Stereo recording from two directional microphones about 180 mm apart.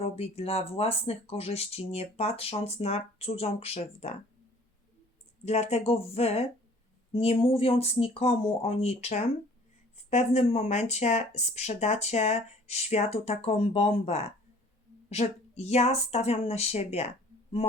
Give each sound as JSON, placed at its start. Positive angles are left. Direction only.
{"t": 0.0, "sound": "speech", "side_deg": 35}
{"t": 5.5, "sound": "speech", "side_deg": 35}